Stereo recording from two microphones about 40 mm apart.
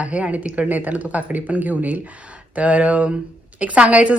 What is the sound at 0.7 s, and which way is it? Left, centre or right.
Speech, right.